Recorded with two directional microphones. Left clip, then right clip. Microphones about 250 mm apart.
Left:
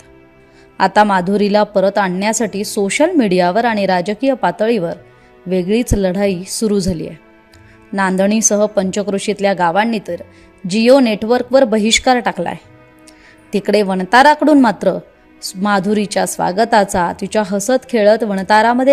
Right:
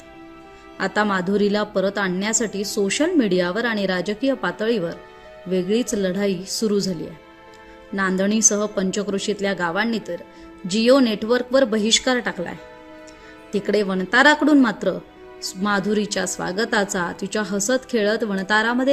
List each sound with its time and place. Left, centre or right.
0.8 s a woman's voice: left